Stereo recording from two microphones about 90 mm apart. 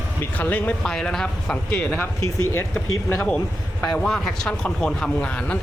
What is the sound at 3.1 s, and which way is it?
Speech, 15° left (ahead or behind).